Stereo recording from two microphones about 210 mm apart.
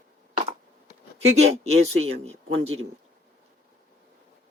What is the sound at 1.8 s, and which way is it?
Speech, 30° right (ahead or behind).